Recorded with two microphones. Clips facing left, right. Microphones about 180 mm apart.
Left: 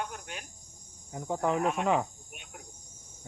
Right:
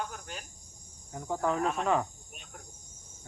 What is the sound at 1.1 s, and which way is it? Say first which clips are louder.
Speech: left 1 dB; 15° left (ahead or behind).